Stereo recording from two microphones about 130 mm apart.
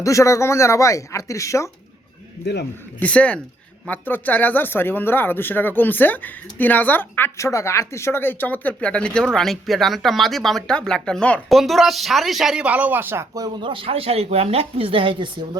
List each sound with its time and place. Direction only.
0.0 s speech: 25° left (ahead or behind)
3.0 s speech: 10° left (ahead or behind); by 13.5 s 25° right (ahead or behind)
13.6 s speech: 40° right (ahead or behind)